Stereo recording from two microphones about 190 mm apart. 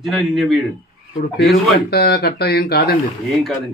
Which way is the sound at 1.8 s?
55° left (ahead or behind).